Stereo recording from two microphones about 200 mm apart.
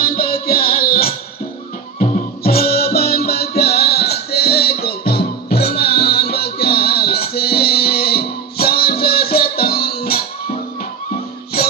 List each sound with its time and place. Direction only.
0.4 s music: 50° left (ahead or behind)